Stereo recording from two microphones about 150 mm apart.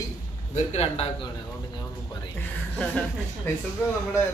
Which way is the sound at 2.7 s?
10° left (ahead or behind).